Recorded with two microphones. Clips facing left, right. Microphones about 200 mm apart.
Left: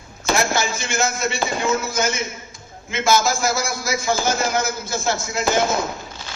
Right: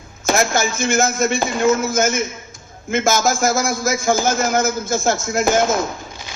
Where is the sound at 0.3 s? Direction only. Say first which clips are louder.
Right 3 dB; 50° right (ahead or behind).